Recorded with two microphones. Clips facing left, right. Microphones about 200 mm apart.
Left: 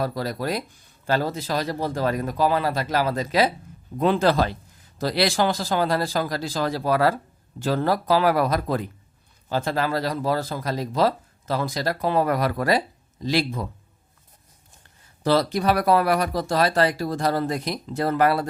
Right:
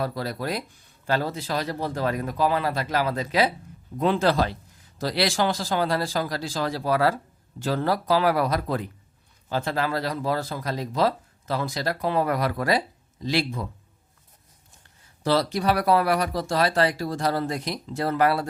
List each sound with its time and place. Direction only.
0.0 s speech: 40° left (ahead or behind)
15.2 s speech: 50° left (ahead or behind)